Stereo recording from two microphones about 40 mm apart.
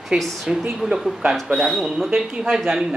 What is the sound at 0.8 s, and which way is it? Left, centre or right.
Speech, centre.